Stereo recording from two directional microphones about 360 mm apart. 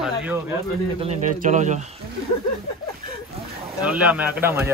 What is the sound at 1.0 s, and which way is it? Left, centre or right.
Speech, centre.